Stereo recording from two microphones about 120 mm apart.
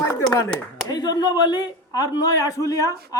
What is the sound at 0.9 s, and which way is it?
Speech, 30° left (ahead or behind).